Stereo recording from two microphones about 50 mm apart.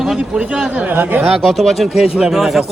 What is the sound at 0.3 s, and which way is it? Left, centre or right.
Speech, right.